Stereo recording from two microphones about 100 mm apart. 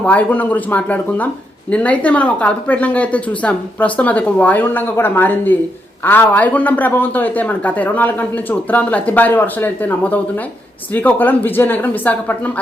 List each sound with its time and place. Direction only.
0.0 s a man's voice: 15° left (ahead or behind)